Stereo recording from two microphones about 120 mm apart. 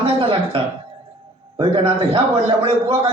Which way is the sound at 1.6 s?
45° right (ahead or behind).